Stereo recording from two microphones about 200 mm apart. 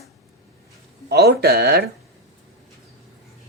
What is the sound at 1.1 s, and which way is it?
Speech, 55° right (ahead or behind).